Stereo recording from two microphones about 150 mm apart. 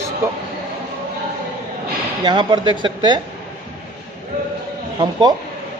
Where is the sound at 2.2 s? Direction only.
30° right (ahead or behind).